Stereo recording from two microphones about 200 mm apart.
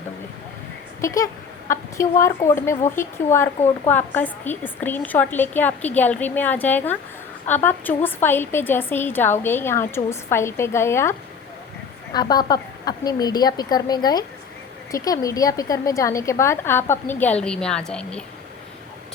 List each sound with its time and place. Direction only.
1.0 s speech: 15° left (ahead or behind)
12.1 s a woman's voice: 20° left (ahead or behind); by 18.2 s 5° left (ahead or behind)